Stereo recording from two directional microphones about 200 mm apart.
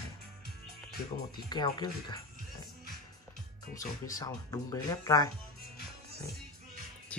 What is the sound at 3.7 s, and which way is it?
Speech, 15° left (ahead or behind).